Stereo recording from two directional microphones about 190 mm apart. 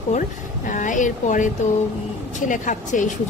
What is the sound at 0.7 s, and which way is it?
A woman's voice, 40° left (ahead or behind).